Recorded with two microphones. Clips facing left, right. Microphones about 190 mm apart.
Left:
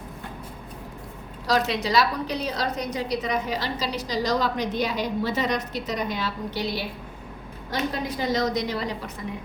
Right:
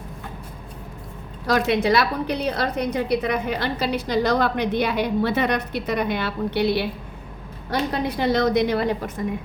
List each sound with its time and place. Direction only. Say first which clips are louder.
1.5 s a woman's voice: right 5 dB; 55° right (ahead or behind)